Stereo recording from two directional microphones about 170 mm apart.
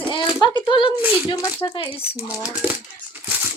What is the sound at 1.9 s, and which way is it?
Speech, 10° right (ahead or behind).